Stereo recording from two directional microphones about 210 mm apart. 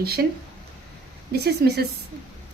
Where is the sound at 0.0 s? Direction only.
45° right (ahead or behind).